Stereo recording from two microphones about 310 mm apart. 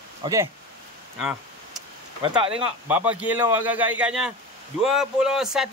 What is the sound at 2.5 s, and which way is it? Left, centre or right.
A man's voice, centre.